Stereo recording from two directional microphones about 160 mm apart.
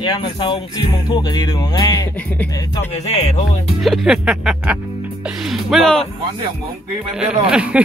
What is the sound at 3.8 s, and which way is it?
Speech, centre (ahead or behind).